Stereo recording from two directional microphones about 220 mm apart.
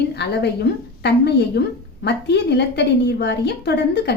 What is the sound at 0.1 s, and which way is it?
A woman's voice, 50° left (ahead or behind).